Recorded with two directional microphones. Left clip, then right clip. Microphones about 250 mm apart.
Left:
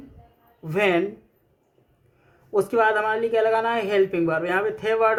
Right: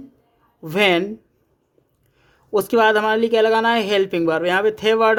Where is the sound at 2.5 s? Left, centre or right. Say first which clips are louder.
Right 4 dB; right.